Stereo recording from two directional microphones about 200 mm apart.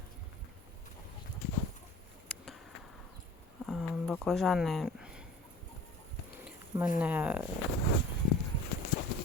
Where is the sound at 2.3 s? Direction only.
5° left (ahead or behind).